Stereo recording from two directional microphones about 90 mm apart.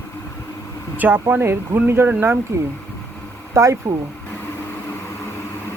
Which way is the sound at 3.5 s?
30° right (ahead or behind).